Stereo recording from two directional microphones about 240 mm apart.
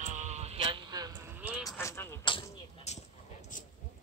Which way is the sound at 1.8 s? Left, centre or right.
Centre.